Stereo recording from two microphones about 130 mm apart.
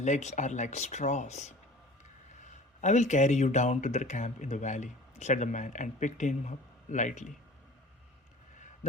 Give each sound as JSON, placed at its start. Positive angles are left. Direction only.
{"t": 0.0, "sound": "speech", "side_deg": 65}